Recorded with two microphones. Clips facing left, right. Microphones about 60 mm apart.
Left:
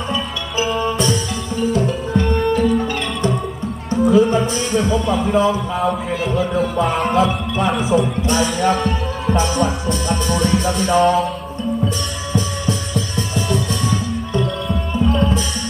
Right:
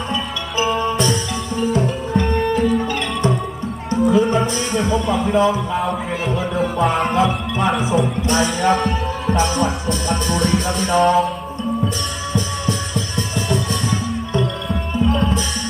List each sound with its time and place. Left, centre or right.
0.1 s music: centre
4.0 s speech: centre
14.7 s music: centre